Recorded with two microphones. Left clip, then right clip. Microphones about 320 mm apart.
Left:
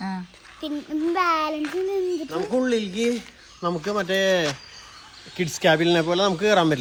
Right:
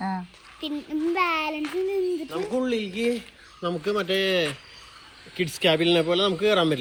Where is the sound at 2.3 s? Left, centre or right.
Left.